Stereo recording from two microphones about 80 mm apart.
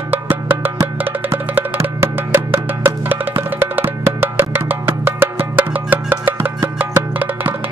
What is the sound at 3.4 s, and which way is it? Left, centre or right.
Wood block, right.